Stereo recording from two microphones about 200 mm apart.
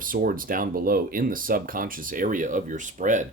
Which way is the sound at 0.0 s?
45° right (ahead or behind).